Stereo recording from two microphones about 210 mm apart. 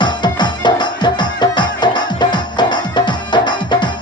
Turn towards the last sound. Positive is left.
turn(degrees=20)  # may be behind; listen again after turning